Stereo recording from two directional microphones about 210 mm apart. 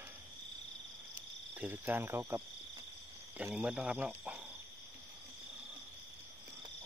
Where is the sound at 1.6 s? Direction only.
10° right (ahead or behind).